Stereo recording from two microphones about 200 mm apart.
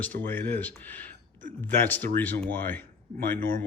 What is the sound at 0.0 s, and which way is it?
Speech, 10° left (ahead or behind).